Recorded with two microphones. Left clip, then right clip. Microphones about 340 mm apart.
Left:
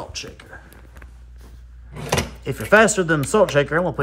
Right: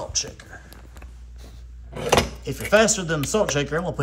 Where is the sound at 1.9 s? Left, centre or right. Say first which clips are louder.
Right 4 dB; centre.